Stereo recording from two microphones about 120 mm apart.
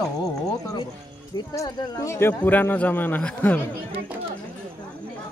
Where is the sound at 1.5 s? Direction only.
30° left (ahead or behind); by 3.6 s 15° left (ahead or behind).